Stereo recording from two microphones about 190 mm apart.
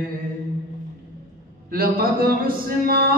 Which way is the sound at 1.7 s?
50° right (ahead or behind).